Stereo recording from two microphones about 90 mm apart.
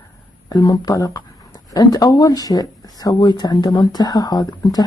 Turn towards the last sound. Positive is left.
turn(degrees=45)  # may be behind; listen again after turning